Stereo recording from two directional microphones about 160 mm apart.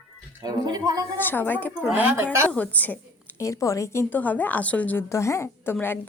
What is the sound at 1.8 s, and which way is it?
Speech, 10° right (ahead or behind).